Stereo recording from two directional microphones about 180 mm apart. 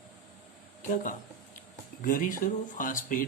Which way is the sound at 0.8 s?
45° left (ahead or behind).